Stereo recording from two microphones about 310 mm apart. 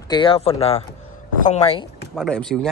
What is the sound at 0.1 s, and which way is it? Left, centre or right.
Speech, centre.